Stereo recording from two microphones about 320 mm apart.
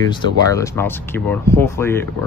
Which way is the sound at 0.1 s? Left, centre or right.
Centre.